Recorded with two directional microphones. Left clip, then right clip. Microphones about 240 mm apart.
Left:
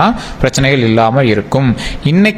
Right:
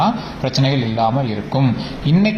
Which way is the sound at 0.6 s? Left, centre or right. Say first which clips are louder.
Left 7 dB; left.